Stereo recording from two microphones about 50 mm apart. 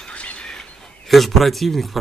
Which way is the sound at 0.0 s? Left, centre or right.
Left.